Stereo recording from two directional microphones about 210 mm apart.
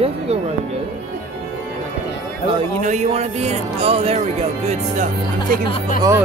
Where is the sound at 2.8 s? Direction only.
35° right (ahead or behind).